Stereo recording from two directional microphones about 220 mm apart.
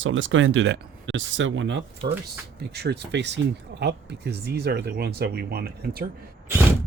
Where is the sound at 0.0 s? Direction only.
60° right (ahead or behind); by 6.1 s 45° right (ahead or behind).